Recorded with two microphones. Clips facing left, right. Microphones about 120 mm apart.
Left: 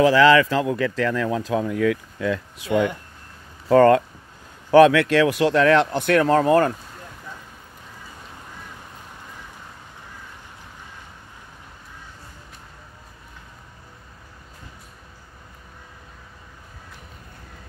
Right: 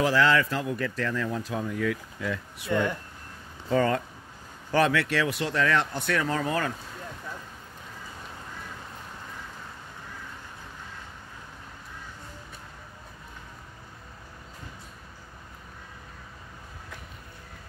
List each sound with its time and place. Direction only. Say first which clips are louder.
0.1 s speech: left 8 dB; 90° left
3.6 s speech: left 10 dB; 70° left (ahead or behind); by 6.7 s 55° left (ahead or behind)